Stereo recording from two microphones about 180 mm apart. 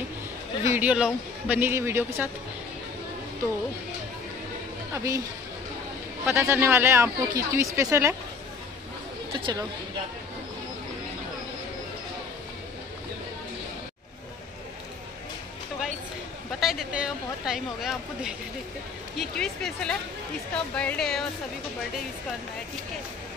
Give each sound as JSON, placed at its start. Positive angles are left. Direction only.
{"t": 0.7, "sound": "speech", "side_deg": -10}
{"t": 4.9, "sound": "speech", "side_deg": -15}
{"t": 6.2, "sound": "speech", "side_deg": -15}
{"t": 16.5, "sound": "speech", "side_deg": 0}